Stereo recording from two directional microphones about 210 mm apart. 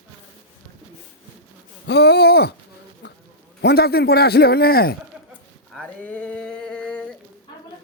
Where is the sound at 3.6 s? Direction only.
50° left (ahead or behind).